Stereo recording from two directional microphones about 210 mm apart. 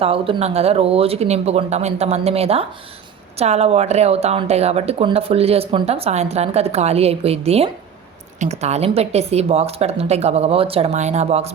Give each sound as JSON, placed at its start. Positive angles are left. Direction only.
{"t": 0.0, "sound": "speech", "side_deg": -25}